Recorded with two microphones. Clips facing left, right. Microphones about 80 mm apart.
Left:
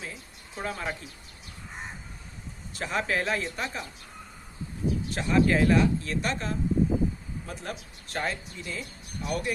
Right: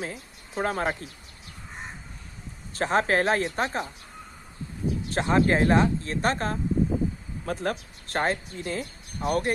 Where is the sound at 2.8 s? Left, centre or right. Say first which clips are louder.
Right 6 dB; right.